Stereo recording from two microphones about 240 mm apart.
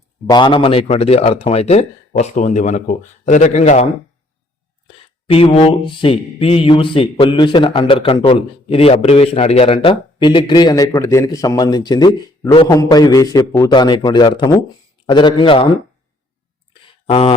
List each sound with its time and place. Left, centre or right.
0.3 s mantra: centre
4.9 s mantra: left
12.5 s a man's voice: centre
15.0 s mantra: centre
17.1 s mantra: left